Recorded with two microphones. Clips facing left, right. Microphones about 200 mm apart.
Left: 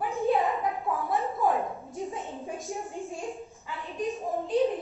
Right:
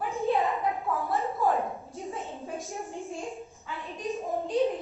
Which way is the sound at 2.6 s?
Centre (ahead or behind).